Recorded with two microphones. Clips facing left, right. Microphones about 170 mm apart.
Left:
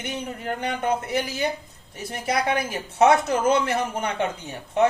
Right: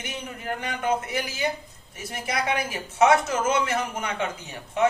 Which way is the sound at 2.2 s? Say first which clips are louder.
Left 3 dB; 35° left (ahead or behind).